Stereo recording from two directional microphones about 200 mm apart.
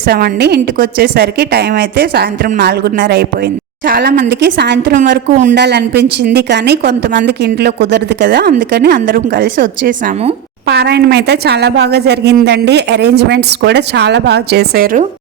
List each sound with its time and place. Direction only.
0.0 s a woman's voice: 55° right (ahead or behind)
10.7 s a woman's voice: 55° right (ahead or behind)